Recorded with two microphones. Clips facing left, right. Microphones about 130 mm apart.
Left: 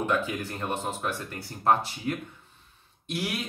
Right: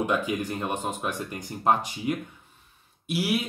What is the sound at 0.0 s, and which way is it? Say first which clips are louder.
Speech: right 2 dB; 15° right (ahead or behind).